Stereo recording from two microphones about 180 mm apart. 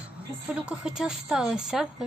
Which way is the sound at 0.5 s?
5° right (ahead or behind).